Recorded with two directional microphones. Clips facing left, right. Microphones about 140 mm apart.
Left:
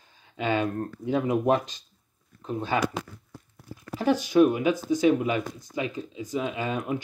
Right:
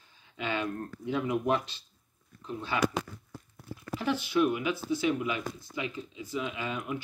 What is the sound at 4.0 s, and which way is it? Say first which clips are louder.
Speech: left 7 dB; 40° left (ahead or behind).